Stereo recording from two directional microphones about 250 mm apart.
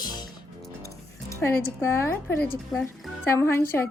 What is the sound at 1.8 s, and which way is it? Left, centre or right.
Speech, centre.